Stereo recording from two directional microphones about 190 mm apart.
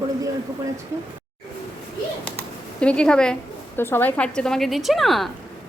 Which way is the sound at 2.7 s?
5° left (ahead or behind).